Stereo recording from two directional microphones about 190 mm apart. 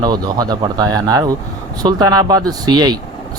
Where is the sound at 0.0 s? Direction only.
20° right (ahead or behind).